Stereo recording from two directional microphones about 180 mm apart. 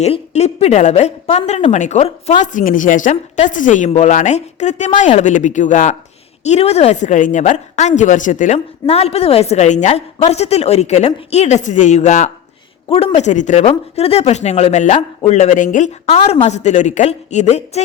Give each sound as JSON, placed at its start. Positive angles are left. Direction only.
{"t": 0.0, "sound": "a woman's voice", "side_deg": 35}